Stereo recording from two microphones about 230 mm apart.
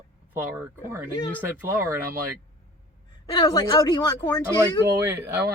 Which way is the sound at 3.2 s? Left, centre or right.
Left.